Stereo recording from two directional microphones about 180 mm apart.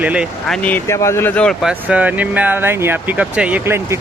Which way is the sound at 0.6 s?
10° left (ahead or behind).